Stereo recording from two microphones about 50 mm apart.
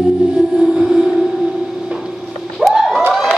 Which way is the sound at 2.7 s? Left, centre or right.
Centre.